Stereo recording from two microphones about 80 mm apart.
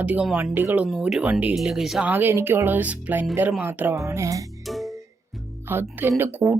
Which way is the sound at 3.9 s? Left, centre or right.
Right.